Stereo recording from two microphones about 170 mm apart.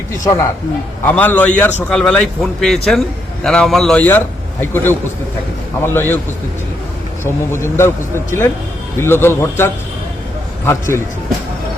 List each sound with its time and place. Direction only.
1.0 s a man's voice: 10° left (ahead or behind)
7.3 s a man's voice: 15° left (ahead or behind)